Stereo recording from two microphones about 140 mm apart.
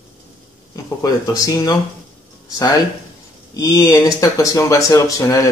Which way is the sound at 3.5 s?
20° left (ahead or behind).